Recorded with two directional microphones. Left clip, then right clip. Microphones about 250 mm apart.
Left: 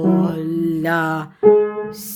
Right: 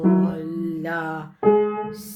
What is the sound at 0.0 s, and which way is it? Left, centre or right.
Music, left.